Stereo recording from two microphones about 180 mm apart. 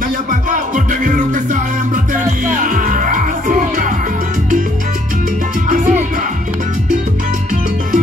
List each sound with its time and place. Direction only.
0.3 s music: 45° right (ahead or behind)
5.7 s music: 40° right (ahead or behind)